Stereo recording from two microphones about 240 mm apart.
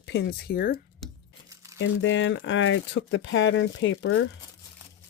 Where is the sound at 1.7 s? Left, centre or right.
Left.